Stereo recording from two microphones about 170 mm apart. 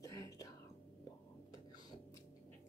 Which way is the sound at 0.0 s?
20° left (ahead or behind).